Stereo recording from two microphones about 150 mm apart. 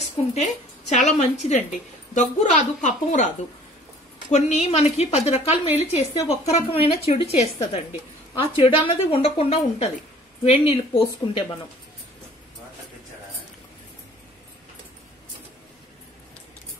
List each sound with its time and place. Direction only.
0.3 s a woman's voice: 50° left (ahead or behind)
4.3 s a woman's voice: 50° left (ahead or behind)